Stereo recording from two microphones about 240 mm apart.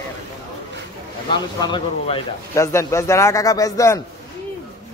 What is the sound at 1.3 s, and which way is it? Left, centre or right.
A man's voice, centre.